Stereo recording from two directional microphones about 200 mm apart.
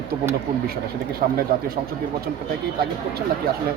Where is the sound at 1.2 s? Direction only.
45° right (ahead or behind).